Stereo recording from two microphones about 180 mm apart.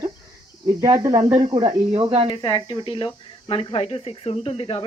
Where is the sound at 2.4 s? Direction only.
30° left (ahead or behind).